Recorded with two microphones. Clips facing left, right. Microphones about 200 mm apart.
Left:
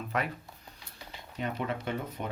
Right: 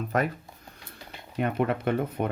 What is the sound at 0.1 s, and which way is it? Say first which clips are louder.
Speech: right 6 dB; 45° right (ahead or behind).